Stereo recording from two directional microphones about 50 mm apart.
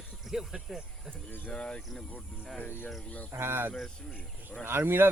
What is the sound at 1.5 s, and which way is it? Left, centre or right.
Speech, centre.